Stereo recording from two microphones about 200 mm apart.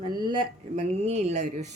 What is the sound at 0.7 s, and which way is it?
Speech, 30° right (ahead or behind).